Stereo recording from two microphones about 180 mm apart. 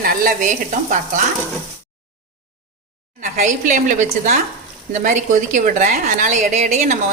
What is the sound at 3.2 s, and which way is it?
A woman's voice, 45° right (ahead or behind).